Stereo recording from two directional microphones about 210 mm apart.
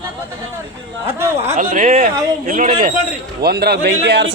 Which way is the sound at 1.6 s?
40° right (ahead or behind).